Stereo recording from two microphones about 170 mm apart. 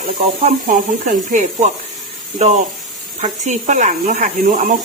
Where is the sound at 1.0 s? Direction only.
50° right (ahead or behind).